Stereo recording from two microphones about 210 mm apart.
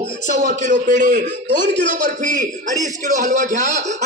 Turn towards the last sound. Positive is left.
turn(degrees=-35)  # may be behind; listen again after turning